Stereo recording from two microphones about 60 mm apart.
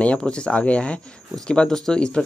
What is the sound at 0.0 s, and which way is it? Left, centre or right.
Speech, centre.